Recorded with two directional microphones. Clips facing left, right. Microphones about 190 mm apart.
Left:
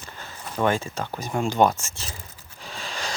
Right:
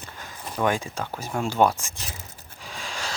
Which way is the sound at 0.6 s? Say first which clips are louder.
Left 1 dB; 10° right (ahead or behind).